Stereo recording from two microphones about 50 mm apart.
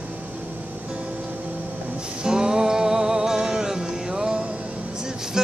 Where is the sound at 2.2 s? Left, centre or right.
Centre.